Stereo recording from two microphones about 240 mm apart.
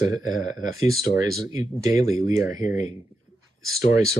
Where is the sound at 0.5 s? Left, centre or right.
Centre.